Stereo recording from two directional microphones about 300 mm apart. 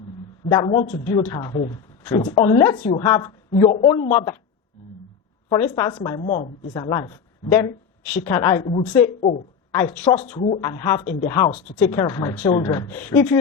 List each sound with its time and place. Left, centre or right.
0.5 s a woman's voice: centre
5.5 s a woman's voice: centre
9.7 s a woman's voice: centre
10.3 s speech: left
10.6 s a woman's voice: centre
11.0 s a woman's voice: left